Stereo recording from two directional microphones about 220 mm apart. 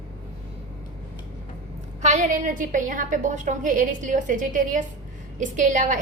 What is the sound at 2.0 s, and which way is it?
A woman's voice, 35° right (ahead or behind).